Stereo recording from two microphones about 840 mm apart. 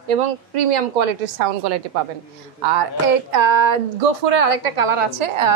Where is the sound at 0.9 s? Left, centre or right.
Right.